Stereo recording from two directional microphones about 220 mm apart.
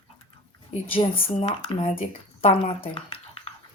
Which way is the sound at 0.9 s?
25° left (ahead or behind).